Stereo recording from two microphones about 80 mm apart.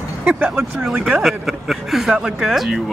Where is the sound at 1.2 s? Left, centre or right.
Centre.